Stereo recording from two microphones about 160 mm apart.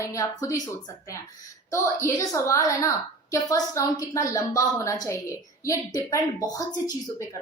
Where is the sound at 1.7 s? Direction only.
15° left (ahead or behind).